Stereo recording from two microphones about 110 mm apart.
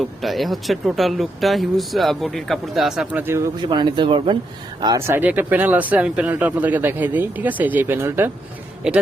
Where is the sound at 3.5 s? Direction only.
45° right (ahead or behind).